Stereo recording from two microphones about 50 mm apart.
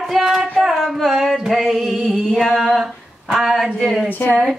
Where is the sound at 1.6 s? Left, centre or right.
Centre.